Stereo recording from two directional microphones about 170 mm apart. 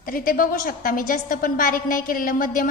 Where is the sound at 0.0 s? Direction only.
55° left (ahead or behind).